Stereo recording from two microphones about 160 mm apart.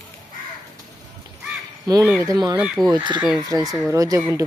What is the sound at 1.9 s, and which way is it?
Speech, 25° right (ahead or behind).